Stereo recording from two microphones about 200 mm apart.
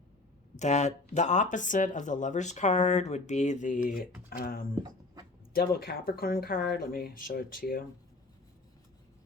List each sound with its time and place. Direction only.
0.5 s speech: 35° left (ahead or behind)
4.7 s a sound: 20° right (ahead or behind)
5.5 s speech: 50° left (ahead or behind)